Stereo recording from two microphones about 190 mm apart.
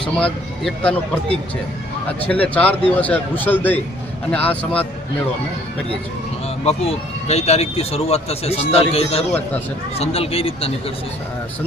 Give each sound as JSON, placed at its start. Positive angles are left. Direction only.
{"t": 0.6, "sound": "a man's voice", "side_deg": 5}
{"t": 6.7, "sound": "speech", "side_deg": 35}